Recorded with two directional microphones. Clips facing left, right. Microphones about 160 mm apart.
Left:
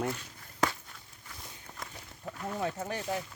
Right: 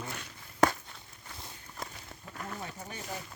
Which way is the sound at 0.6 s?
50° right (ahead or behind).